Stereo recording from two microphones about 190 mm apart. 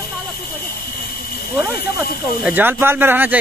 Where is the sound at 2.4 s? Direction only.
10° right (ahead or behind).